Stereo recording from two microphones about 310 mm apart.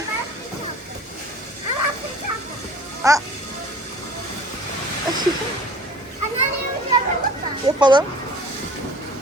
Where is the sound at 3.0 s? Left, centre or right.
Centre.